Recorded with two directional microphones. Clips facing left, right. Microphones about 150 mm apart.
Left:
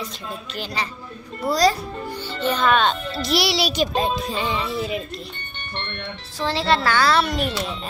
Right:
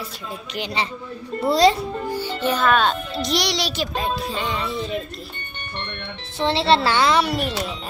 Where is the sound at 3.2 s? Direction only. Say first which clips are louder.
Left 2 dB; 5° left (ahead or behind).